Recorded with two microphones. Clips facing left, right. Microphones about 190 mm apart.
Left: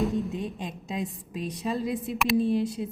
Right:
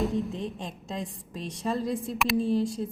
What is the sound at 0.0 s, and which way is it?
A woman's voice, centre (ahead or behind).